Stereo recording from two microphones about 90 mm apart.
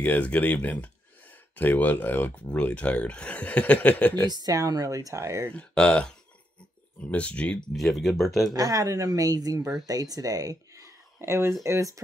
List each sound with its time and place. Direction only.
0.0 s speech: 20° left (ahead or behind)
4.3 s speech: 45° right (ahead or behind)
5.5 s speech: 15° left (ahead or behind)
7.7 s speech: centre (ahead or behind)
8.5 s speech: 40° right (ahead or behind)
11.1 s speech: 30° right (ahead or behind)